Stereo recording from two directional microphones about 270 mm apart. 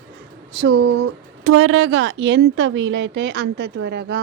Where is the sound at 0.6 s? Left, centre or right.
Right.